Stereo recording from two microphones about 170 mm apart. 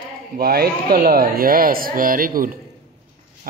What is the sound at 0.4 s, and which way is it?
Speech, 65° right (ahead or behind).